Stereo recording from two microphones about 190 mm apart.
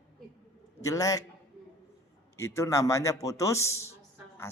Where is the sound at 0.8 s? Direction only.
20° left (ahead or behind).